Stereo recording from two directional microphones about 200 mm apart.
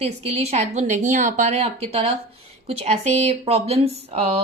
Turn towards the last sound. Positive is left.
turn(degrees=-30)  # may be behind; listen again after turning